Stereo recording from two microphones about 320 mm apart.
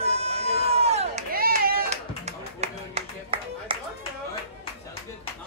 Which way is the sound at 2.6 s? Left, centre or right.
Centre.